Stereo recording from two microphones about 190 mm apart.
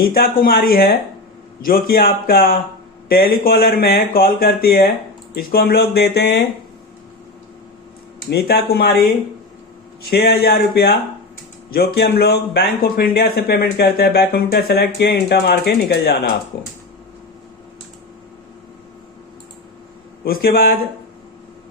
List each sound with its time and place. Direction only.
0.0 s speech: 50° left (ahead or behind)
8.3 s speech: 55° left (ahead or behind)
10.1 s speech: 55° left (ahead or behind)
20.2 s speech: 50° left (ahead or behind)